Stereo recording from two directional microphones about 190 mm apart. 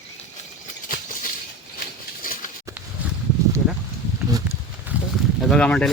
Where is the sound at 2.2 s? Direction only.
45° left (ahead or behind).